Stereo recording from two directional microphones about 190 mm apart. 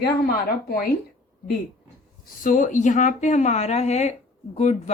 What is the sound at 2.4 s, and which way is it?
Speech, 45° left (ahead or behind).